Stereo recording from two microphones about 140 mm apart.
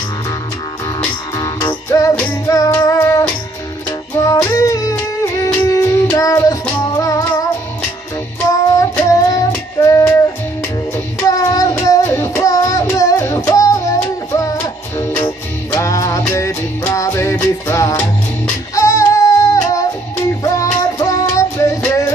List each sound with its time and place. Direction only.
1.3 s music: 25° left (ahead or behind)
9.1 s child singing: 25° left (ahead or behind)
11.2 s child singing: 25° left (ahead or behind)
15.0 s music: 20° left (ahead or behind)